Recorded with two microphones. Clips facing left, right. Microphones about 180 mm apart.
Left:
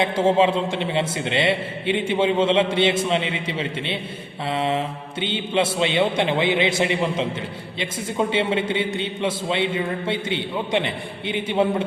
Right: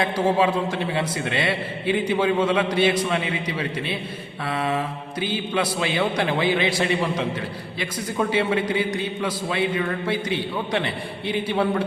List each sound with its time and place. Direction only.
0.0 s a man's voice: 25° left (ahead or behind)